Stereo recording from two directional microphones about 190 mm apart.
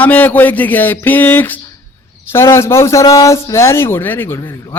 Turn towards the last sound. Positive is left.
turn(degrees=15)  # may be behind; listen again after turning